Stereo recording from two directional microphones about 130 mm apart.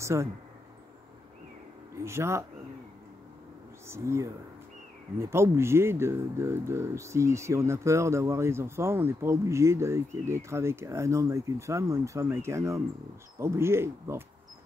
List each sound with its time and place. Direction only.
0.0 s speech: 20° right (ahead or behind)
2.0 s speech: 20° right (ahead or behind)
3.8 s speech: 20° right (ahead or behind)